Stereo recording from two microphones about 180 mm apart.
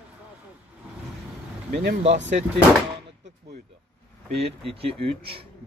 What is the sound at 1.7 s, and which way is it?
Speech, 65° right (ahead or behind).